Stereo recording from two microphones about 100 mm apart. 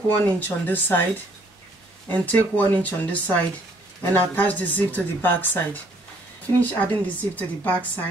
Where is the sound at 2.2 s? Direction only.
15° left (ahead or behind).